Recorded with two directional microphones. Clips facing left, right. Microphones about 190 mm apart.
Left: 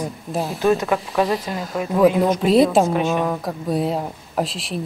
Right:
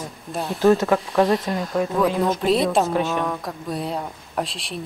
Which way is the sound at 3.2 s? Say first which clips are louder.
Left 4 dB; centre (ahead or behind).